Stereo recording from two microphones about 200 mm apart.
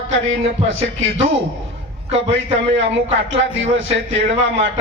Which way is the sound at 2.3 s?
30° right (ahead or behind).